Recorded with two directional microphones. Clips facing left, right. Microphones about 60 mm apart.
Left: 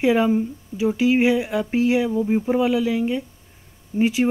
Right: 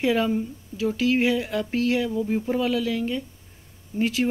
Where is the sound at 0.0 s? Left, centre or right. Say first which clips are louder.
Left 4 dB; centre.